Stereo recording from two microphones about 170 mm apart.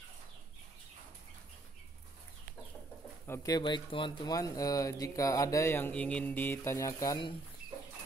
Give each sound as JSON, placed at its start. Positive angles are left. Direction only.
{"t": 3.3, "sound": "speech", "side_deg": 20}